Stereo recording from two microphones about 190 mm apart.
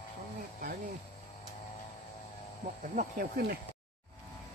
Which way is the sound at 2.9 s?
55° right (ahead or behind).